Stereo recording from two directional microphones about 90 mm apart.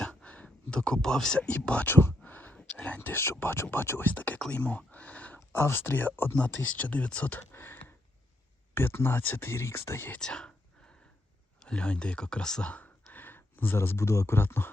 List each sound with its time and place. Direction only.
0.0 s speech: 10° left (ahead or behind); by 10.2 s 25° left (ahead or behind)
10.2 s a sound: 10° left (ahead or behind)
11.6 s speech: 10° left (ahead or behind)